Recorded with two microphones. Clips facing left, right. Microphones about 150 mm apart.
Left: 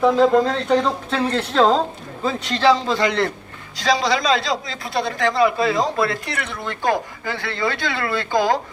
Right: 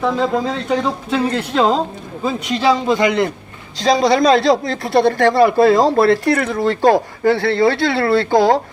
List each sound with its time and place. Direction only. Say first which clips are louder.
0.0 s speech: left 3 dB; centre (ahead or behind); by 3.3 s 15° right (ahead or behind)
3.8 s speech: right 6 dB; 45° right (ahead or behind); by 5.1 s 65° right (ahead or behind)
5.1 s speech: right 2 dB; 30° right (ahead or behind)
5.5 s speech: right 8 dB; 70° right (ahead or behind)
6.0 s speech: right 10 dB; 35° right (ahead or behind)
6.6 s speech: right 6 dB; 85° right; by 8.5 s 70° right (ahead or behind)